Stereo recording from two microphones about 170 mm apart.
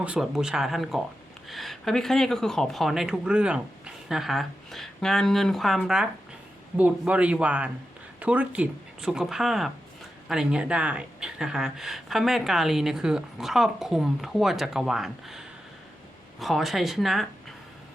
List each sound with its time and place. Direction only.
0.0 s speech: 5° right (ahead or behind)